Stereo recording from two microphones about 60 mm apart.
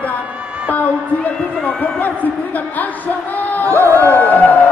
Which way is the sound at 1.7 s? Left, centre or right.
Left.